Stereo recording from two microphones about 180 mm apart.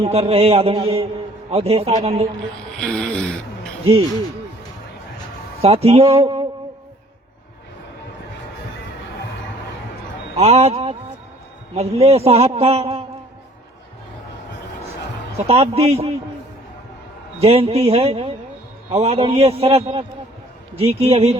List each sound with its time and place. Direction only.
0.0 s a man's voice: 35° right (ahead or behind)
2.8 s speech: 5° left (ahead or behind)
5.6 s a man's voice: 35° right (ahead or behind)
10.3 s a man's voice: 35° right (ahead or behind)
15.4 s a man's voice: 35° right (ahead or behind)
17.4 s a man's voice: 35° right (ahead or behind)